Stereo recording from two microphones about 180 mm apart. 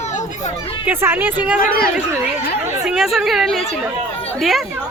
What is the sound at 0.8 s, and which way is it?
Speech, 10° right (ahead or behind).